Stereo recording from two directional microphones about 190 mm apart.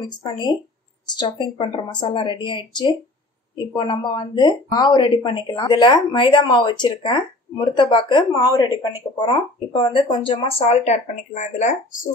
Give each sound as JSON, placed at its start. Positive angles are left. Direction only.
{"t": 0.0, "sound": "speech", "side_deg": 25}
{"t": 10.9, "sound": "speech", "side_deg": 40}